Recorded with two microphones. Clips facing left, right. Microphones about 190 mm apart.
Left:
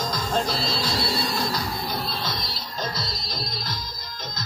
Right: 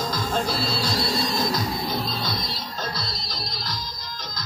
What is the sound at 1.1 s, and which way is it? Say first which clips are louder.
Music: right 2 dB; 20° right (ahead or behind).